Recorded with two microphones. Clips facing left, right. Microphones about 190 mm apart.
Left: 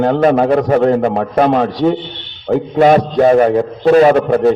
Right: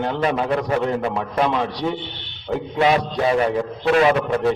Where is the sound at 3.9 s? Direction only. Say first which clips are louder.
Left 8 dB; 40° left (ahead or behind).